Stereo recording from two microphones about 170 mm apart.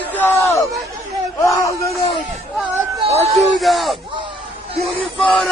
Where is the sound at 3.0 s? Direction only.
35° right (ahead or behind).